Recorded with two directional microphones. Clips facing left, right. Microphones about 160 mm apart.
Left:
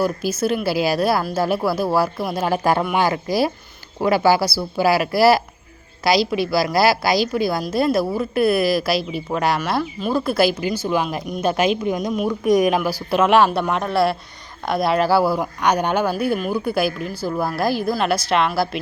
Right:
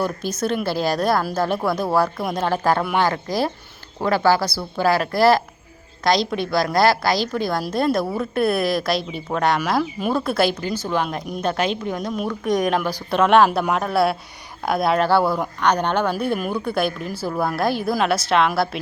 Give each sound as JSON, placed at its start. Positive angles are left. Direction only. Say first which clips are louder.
{"t": 0.0, "sound": "speech", "louder": "left 3 dB", "side_deg": 5}